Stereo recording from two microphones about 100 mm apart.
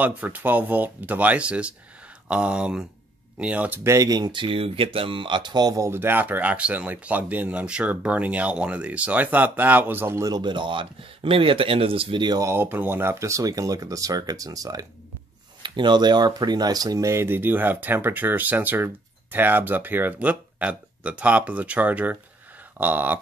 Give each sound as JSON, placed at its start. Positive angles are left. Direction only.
{"t": 0.0, "sound": "speech", "side_deg": -15}
{"t": 3.8, "sound": "speech", "side_deg": -30}
{"t": 5.9, "sound": "speech", "side_deg": -20}
{"t": 10.2, "sound": "speech", "side_deg": -45}
{"t": 12.4, "sound": "speech", "side_deg": -30}
{"t": 12.6, "sound": "speech", "side_deg": -20}
{"t": 15.6, "sound": "speech", "side_deg": -50}